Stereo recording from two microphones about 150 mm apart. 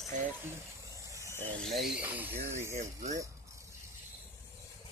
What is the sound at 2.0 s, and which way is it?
Speech, 10° right (ahead or behind).